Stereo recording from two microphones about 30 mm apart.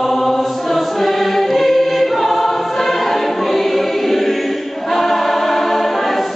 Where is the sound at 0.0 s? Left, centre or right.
Centre.